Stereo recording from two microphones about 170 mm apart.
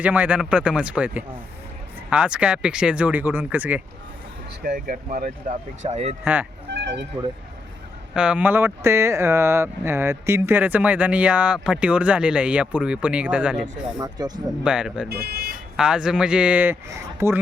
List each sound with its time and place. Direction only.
0.0 s speech: 10° right (ahead or behind)
4.6 s speech: 55° right (ahead or behind); by 6.1 s 40° right (ahead or behind)
6.2 s speech: 10° right (ahead or behind)
6.7 s cat: 90° right
8.1 s speech: 5° right (ahead or behind)
13.8 s speech: 25° right (ahead or behind)
14.6 s speech: 5° right (ahead or behind)
15.1 s speech: 70° right (ahead or behind)
15.5 s speech: 5° right (ahead or behind)